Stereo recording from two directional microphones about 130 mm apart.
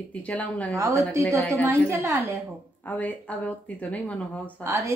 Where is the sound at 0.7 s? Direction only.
20° right (ahead or behind).